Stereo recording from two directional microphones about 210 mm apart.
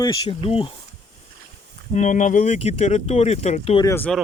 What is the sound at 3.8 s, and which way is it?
Speech, 10° left (ahead or behind).